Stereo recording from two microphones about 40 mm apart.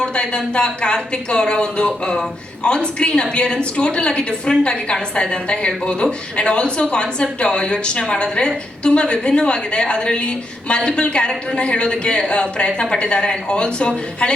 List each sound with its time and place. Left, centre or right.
0.0 s a woman's voice: left